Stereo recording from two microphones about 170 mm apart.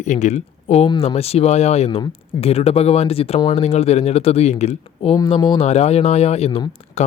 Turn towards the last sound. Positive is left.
turn(degrees=40)  # may be behind; listen again after turning